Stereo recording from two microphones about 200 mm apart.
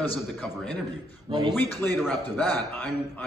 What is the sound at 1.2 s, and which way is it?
Speech, 20° right (ahead or behind).